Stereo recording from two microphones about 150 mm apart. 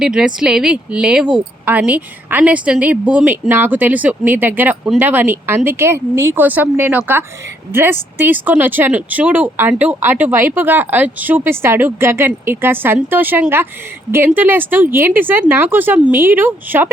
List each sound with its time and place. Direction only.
0.0 s speech: 5° right (ahead or behind)